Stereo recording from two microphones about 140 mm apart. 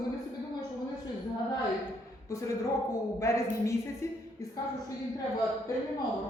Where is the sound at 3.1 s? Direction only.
20° left (ahead or behind).